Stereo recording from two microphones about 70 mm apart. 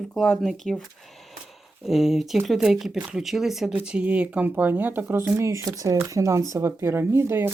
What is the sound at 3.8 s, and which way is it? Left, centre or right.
Speech, centre.